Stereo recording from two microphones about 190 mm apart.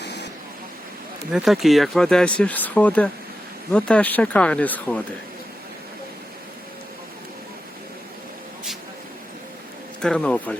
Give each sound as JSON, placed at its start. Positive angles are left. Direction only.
{"t": 0.0, "sound": "vehicle", "side_deg": 65}
{"t": 1.3, "sound": "speech", "side_deg": -5}
{"t": 10.0, "sound": "speech", "side_deg": 5}